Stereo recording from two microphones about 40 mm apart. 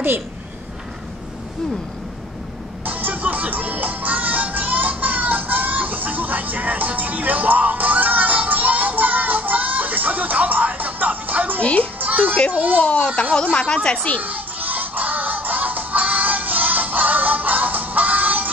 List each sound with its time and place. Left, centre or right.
2.8 s music: right
11.6 s music: left
12.0 s music: right
12.5 s speech: right
12.8 s speech: left
14.2 s music: right